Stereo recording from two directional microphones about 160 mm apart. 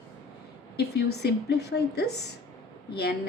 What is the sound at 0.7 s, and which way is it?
A woman's voice, 90° left.